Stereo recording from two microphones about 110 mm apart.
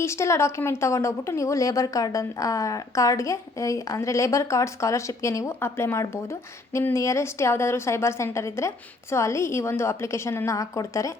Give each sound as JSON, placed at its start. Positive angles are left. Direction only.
{"t": 0.0, "sound": "speech", "side_deg": 25}